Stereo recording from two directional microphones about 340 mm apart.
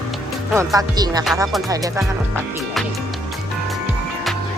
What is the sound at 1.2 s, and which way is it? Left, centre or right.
Speech, centre.